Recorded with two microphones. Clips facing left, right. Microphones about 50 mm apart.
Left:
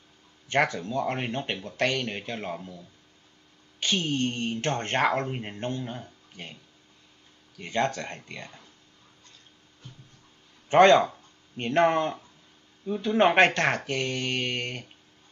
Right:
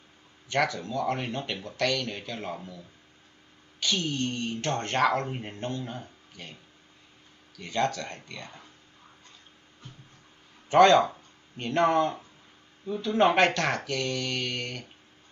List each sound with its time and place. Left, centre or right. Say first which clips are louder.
0.5 s speech: left 2 dB; left
3.8 s a woman's voice: left 2 dB; left
7.5 s a woman's voice: left 1 dB; left
10.7 s speech: left 1 dB; left